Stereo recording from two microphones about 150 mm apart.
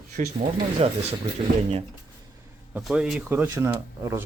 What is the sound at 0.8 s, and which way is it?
Speech, 45° right (ahead or behind).